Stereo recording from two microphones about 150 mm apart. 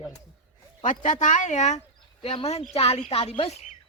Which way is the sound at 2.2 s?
40° left (ahead or behind).